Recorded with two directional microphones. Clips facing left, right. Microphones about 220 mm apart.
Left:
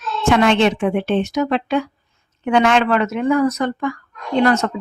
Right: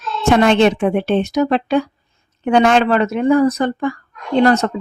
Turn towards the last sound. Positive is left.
turn(degrees=-35)  # may be behind; listen again after turning